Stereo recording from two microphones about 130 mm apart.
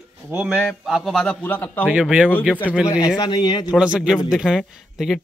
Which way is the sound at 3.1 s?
35° left (ahead or behind).